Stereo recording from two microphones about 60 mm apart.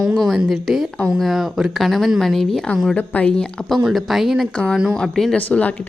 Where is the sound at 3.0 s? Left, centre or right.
Left.